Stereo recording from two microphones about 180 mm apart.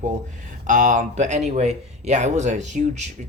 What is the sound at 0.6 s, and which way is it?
Speech, 45° right (ahead or behind).